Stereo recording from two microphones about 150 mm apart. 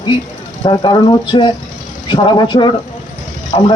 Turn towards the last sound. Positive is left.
turn(degrees=35)  # may be behind; listen again after turning